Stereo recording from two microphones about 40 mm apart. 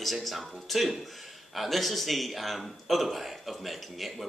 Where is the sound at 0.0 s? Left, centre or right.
Centre.